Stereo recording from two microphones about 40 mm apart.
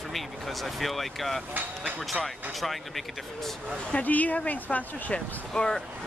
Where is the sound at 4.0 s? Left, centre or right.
Left.